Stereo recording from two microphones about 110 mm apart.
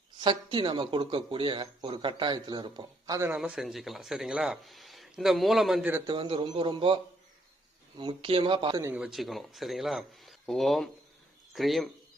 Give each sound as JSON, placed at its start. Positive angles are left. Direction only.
{"t": 0.2, "sound": "speech", "side_deg": -45}
{"t": 3.3, "sound": "speech", "side_deg": -10}
{"t": 6.1, "sound": "speech", "side_deg": -50}
{"t": 9.0, "sound": "speech", "side_deg": -5}